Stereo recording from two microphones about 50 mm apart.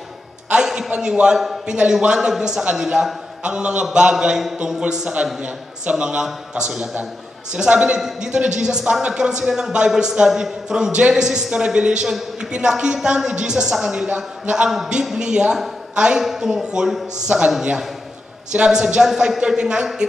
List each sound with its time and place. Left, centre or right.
0.8 s a man's voice: right
15.5 s a sound: centre
16.0 s speech: centre
18.5 s speech: centre